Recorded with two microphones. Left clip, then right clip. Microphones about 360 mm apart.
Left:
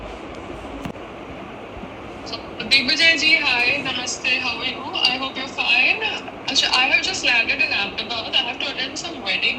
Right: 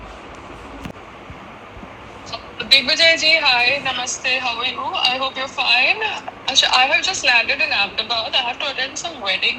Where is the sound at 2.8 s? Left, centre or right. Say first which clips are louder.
Right 2 dB; centre.